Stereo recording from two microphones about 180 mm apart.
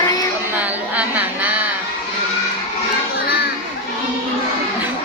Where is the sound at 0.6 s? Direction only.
10° right (ahead or behind).